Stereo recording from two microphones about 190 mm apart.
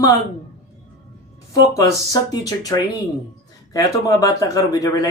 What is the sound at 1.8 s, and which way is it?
Speech, 15° left (ahead or behind).